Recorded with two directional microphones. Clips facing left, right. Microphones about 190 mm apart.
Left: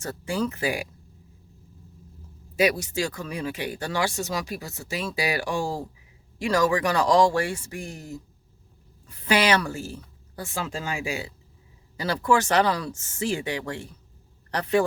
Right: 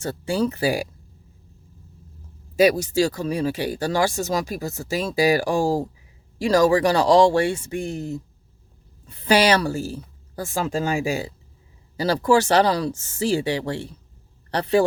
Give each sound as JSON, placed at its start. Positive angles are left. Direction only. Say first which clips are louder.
{"t": 0.0, "sound": "speech", "louder": "right 5 dB", "side_deg": -30}
{"t": 2.6, "sound": "speech", "louder": "right 6 dB", "side_deg": -40}
{"t": 9.0, "sound": "speech", "louder": "right 4 dB", "side_deg": -35}